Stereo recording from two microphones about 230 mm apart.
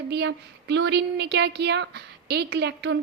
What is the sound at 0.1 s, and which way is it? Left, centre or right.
Speech, right.